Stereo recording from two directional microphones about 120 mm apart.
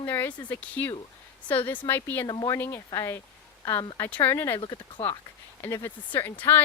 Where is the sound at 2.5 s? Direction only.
20° left (ahead or behind).